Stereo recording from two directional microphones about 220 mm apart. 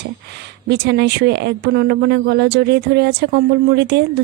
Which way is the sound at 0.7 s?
50° right (ahead or behind).